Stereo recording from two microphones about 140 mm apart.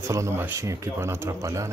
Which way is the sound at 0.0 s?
20° right (ahead or behind).